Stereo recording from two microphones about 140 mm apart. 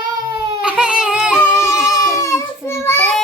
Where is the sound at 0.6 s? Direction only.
5° right (ahead or behind).